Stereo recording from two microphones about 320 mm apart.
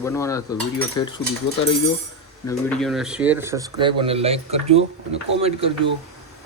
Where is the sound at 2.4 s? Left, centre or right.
Centre.